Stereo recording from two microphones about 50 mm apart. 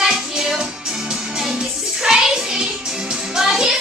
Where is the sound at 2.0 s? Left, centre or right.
Centre.